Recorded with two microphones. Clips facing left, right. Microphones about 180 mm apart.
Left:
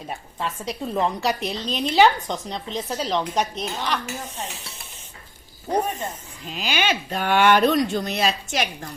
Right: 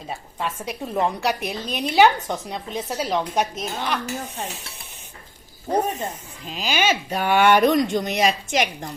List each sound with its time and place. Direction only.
0.3 s a woman's voice: 10° right (ahead or behind)
3.6 s dishes: centre (ahead or behind)
6.5 s speech: 40° right (ahead or behind)
6.8 s a woman's voice: 10° right (ahead or behind)